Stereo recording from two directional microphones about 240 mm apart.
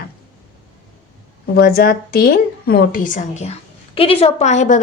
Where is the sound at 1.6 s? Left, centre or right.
Left.